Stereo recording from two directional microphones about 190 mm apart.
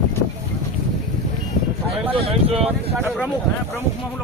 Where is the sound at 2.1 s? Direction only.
30° right (ahead or behind).